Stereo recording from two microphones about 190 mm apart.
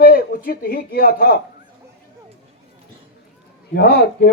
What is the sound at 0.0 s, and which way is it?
A man's voice, 50° left (ahead or behind).